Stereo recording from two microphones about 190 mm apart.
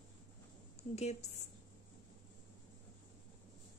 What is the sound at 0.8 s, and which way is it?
Speech, 35° left (ahead or behind).